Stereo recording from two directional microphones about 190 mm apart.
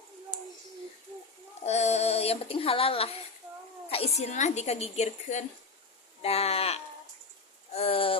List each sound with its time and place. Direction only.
1.6 s speech: 35° left (ahead or behind)
3.8 s cat: 30° left (ahead or behind)
4.2 s a woman's voice: 35° left (ahead or behind)
7.7 s a sound: 30° left (ahead or behind)